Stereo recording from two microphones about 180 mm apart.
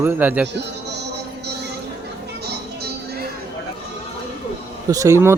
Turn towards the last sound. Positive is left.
turn(degrees=-15)  # may be behind; listen again after turning